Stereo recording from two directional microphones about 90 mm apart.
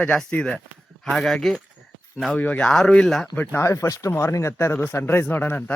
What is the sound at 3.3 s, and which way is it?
Speech, 20° left (ahead or behind).